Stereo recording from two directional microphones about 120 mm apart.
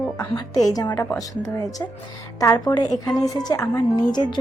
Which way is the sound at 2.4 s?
30° left (ahead or behind).